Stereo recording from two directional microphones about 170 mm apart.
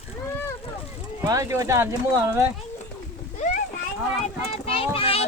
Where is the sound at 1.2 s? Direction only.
20° right (ahead or behind).